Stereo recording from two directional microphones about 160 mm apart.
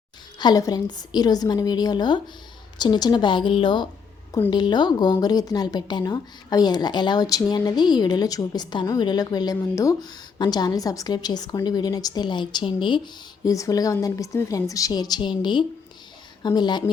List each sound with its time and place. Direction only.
0.3 s a woman's voice: 25° left (ahead or behind)